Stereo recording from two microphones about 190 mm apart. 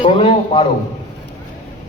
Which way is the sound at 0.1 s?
30° left (ahead or behind).